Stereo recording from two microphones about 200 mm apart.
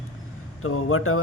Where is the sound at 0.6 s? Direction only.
90° left.